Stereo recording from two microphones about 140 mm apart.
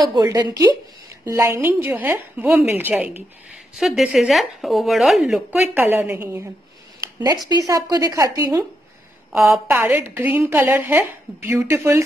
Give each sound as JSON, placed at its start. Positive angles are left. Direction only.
{"t": 0.0, "sound": "a woman's voice", "side_deg": -30}
{"t": 7.0, "sound": "a sound", "side_deg": -25}
{"t": 7.4, "sound": "a woman's voice", "side_deg": -25}